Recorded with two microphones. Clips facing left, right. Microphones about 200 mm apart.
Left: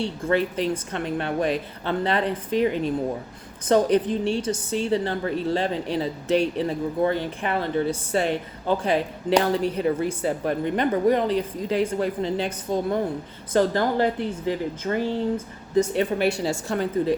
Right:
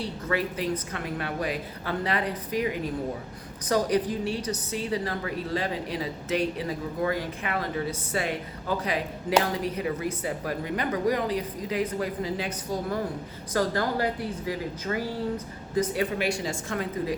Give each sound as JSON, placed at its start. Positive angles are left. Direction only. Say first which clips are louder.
{"t": 0.0, "sound": "a woman's voice", "louder": "left 6 dB", "side_deg": 30}